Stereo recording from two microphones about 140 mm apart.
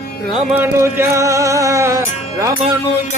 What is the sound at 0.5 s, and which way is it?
Music, 20° right (ahead or behind).